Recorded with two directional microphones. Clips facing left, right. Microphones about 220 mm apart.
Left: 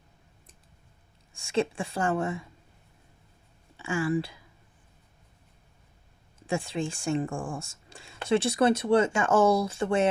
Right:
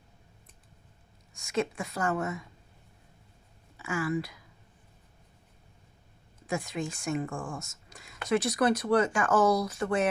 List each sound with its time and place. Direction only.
1.3 s a woman's voice: 30° left (ahead or behind)
3.8 s speech: 30° left (ahead or behind)
6.5 s a woman's voice: 30° left (ahead or behind)